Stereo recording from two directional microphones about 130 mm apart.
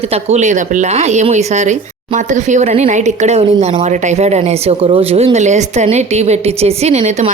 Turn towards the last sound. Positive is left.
turn(degrees=-60)  # may be behind; listen again after turning